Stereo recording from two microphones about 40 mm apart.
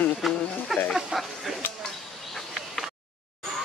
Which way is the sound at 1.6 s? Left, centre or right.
Left.